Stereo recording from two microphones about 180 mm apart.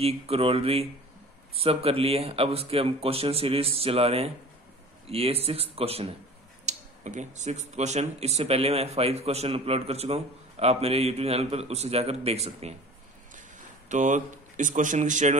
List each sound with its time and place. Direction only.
0.0 s speech: 35° right (ahead or behind)
13.8 s speech: 45° right (ahead or behind)